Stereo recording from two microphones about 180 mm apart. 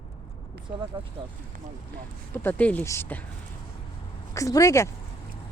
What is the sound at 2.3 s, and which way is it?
Speech, 10° left (ahead or behind).